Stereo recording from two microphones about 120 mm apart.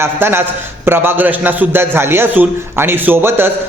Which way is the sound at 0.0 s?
20° right (ahead or behind).